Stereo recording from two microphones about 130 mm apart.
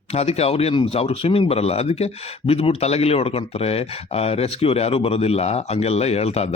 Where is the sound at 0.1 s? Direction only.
55° left (ahead or behind).